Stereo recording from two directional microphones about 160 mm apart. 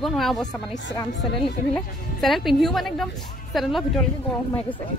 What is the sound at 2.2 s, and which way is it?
A woman's voice, centre (ahead or behind).